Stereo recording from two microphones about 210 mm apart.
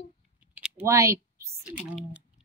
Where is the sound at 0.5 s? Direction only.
10° right (ahead or behind).